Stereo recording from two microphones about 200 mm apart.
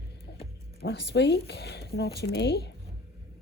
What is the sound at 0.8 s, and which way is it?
Speech, 55° left (ahead or behind).